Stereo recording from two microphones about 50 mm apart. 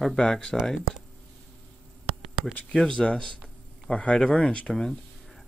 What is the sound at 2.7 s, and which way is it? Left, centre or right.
Speech, centre.